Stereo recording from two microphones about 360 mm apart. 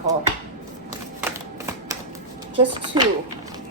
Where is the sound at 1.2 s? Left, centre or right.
Centre.